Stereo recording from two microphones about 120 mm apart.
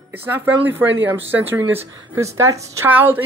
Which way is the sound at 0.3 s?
15° right (ahead or behind).